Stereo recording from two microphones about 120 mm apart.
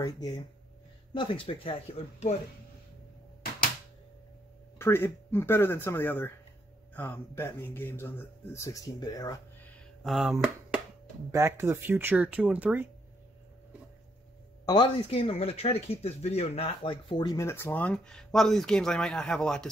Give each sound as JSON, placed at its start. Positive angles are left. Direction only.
{"t": 0.0, "sound": "speech", "side_deg": 35}
{"t": 1.1, "sound": "speech", "side_deg": 45}
{"t": 4.7, "sound": "speech", "side_deg": 20}
{"t": 10.0, "sound": "speech", "side_deg": 0}
{"t": 11.3, "sound": "speech", "side_deg": -25}
{"t": 15.0, "sound": "speech", "side_deg": 55}
{"t": 17.5, "sound": "speech", "side_deg": 20}
{"t": 17.7, "sound": "speech", "side_deg": 5}